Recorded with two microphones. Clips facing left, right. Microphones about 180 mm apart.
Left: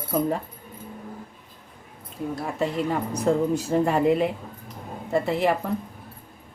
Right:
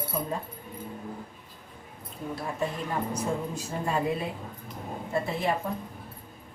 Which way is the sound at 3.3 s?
90° left.